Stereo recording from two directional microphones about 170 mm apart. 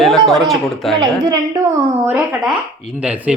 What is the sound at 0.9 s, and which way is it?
A woman's voice, 25° right (ahead or behind).